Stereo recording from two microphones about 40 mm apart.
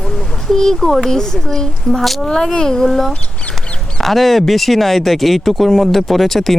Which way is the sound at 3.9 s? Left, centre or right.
Centre.